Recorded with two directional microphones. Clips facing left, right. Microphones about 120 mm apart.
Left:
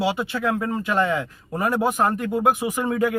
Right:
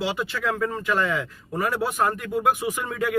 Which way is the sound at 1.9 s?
30° left (ahead or behind).